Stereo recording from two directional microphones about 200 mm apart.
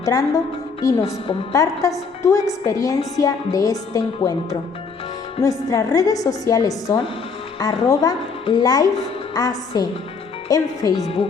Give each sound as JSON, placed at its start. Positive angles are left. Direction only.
{"t": 0.0, "sound": "a woman's voice", "side_deg": 20}
{"t": 11.0, "sound": "a woman's voice", "side_deg": 30}